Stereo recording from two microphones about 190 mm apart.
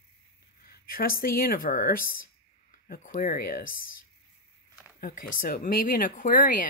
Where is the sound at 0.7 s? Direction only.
50° left (ahead or behind).